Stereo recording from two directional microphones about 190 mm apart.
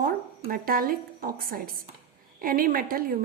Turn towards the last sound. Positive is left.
turn(degrees=-50)  # may be behind; listen again after turning